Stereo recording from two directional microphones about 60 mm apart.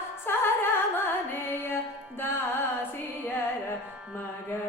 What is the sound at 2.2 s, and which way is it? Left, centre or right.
Carnatic music, left.